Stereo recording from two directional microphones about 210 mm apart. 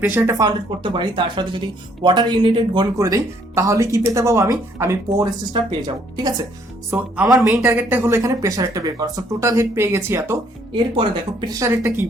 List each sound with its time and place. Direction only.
0.2 s speech: 15° right (ahead or behind)
10.9 s speech: 25° right (ahead or behind)